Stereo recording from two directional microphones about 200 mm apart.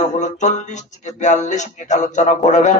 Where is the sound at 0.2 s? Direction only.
35° left (ahead or behind).